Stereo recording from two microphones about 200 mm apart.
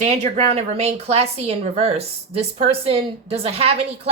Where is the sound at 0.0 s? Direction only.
35° right (ahead or behind).